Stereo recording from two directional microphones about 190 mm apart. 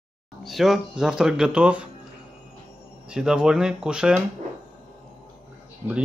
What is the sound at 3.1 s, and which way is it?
Speech, 5° right (ahead or behind).